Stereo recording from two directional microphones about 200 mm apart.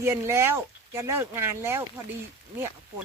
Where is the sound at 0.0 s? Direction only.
15° right (ahead or behind).